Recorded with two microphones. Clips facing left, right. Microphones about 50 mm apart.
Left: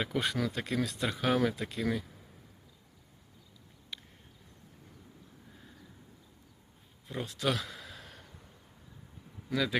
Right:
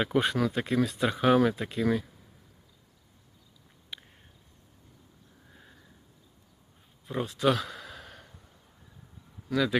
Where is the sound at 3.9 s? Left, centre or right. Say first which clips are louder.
Right 2 dB; centre.